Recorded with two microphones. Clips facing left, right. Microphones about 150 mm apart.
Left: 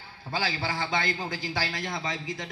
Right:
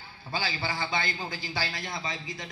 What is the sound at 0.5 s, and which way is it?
A man's voice, 50° left (ahead or behind).